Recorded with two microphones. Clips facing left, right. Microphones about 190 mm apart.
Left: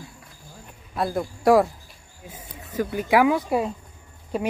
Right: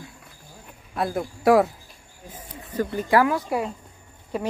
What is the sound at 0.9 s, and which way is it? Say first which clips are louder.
Speech: left 1 dB; centre (ahead or behind).